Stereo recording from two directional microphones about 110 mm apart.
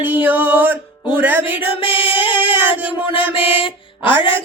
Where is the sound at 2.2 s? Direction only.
15° right (ahead or behind).